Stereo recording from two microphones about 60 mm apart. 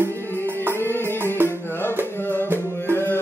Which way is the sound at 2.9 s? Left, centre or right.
Left.